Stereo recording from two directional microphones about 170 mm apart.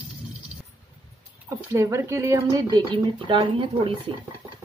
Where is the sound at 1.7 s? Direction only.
15° right (ahead or behind).